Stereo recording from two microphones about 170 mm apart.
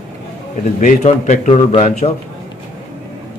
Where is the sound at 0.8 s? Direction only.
45° left (ahead or behind).